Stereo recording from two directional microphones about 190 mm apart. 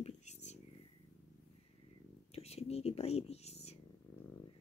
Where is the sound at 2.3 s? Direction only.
35° left (ahead or behind).